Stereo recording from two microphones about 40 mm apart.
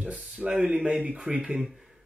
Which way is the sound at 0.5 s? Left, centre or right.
Right.